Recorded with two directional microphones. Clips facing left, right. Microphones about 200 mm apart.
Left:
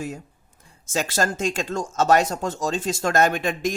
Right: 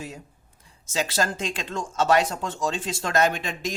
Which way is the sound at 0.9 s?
50° left (ahead or behind).